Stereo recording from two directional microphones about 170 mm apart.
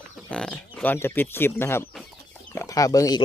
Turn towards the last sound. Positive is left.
turn(degrees=20)  # may be behind; listen again after turning